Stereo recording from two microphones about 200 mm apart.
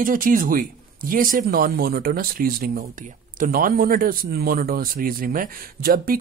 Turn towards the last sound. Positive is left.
turn(degrees=-50)  # may be behind; listen again after turning